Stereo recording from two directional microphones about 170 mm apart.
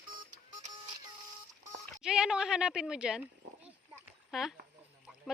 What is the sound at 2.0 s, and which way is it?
Speech, 5° right (ahead or behind).